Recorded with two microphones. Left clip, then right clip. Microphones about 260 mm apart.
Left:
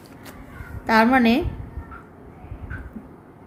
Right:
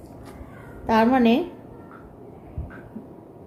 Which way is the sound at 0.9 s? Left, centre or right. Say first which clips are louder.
Left 2 dB; left.